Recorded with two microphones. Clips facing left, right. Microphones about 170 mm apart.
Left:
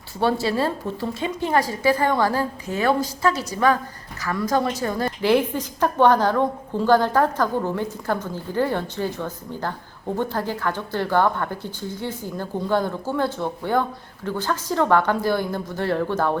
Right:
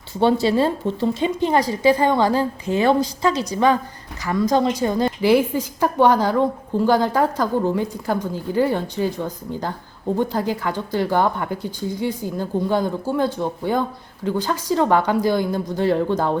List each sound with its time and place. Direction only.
0.2 s a woman's voice: 20° right (ahead or behind)